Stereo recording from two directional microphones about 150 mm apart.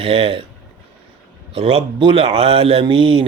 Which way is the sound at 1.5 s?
40° right (ahead or behind).